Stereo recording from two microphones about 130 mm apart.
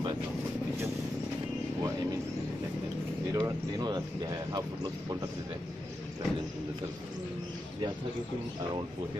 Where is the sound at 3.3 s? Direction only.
30° right (ahead or behind).